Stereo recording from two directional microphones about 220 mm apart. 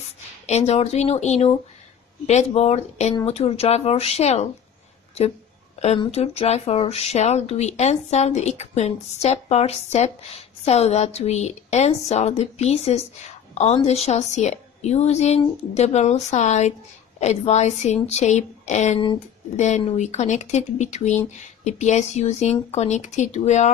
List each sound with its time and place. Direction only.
0.5 s speech: 30° left (ahead or behind)
5.8 s a woman's voice: 30° left (ahead or behind)